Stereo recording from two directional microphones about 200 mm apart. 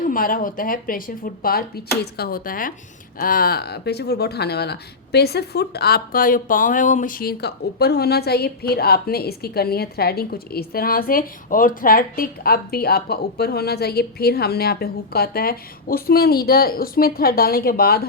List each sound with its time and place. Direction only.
0.1 s speech: 45° left (ahead or behind)